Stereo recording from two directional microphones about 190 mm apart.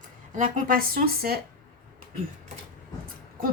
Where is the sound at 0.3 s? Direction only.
45° right (ahead or behind).